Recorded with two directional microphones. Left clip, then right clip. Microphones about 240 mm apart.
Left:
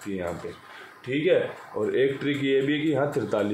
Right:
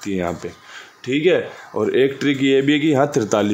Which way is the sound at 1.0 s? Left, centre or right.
Right.